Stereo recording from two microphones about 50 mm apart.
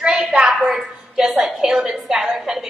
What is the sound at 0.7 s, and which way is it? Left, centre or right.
A woman's voice, centre.